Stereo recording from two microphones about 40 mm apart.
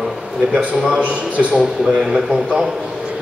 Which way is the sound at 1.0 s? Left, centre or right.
Right.